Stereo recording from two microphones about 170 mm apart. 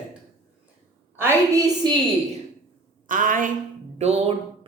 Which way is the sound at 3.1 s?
50° right (ahead or behind).